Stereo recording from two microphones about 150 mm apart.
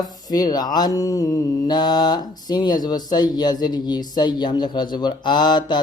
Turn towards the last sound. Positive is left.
turn(degrees=30)  # may be behind; listen again after turning